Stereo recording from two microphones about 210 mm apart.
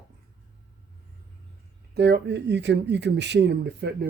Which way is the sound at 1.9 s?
50° right (ahead or behind).